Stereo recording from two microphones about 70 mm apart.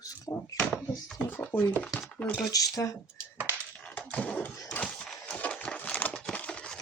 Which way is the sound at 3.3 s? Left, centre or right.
Right.